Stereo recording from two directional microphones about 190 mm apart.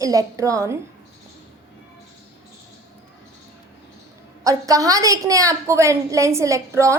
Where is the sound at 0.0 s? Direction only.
20° right (ahead or behind).